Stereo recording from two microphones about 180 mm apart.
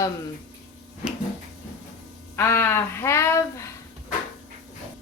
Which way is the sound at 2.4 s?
15° left (ahead or behind).